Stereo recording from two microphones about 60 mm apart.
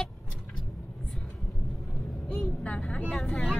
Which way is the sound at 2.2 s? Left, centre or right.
Left.